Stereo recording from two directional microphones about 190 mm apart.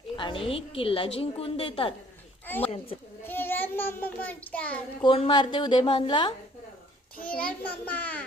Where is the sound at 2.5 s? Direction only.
10° left (ahead or behind).